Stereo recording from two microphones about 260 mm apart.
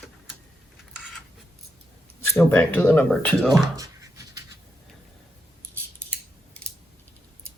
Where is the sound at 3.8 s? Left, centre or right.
Centre.